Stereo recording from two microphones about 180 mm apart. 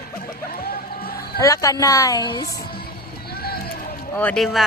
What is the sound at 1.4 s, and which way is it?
A woman's voice, 20° left (ahead or behind).